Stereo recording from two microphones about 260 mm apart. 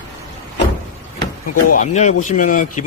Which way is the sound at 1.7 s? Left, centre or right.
Left.